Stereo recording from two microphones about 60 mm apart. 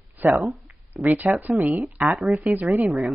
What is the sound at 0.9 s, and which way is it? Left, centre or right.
A woman's voice, right.